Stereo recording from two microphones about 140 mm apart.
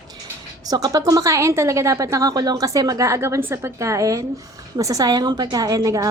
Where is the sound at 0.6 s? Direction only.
25° right (ahead or behind).